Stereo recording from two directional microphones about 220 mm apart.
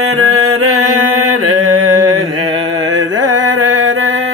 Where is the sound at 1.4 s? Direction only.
90° right.